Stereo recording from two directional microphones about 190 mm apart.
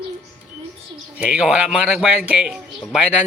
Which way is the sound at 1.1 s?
5° right (ahead or behind).